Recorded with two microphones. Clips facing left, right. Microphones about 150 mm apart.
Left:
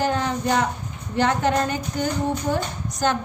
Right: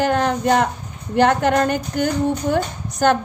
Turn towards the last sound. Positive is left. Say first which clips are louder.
# right 6 dB
turn(degrees=-60)  # may be behind; listen again after turning